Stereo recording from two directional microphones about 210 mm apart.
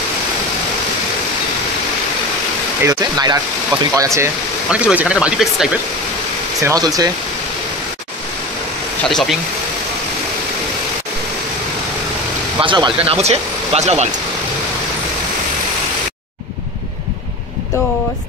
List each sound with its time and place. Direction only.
2.8 s speech: 15° right (ahead or behind)
6.6 s speech: 15° right (ahead or behind)
9.1 s speech: centre (ahead or behind)
12.6 s speech: 20° right (ahead or behind)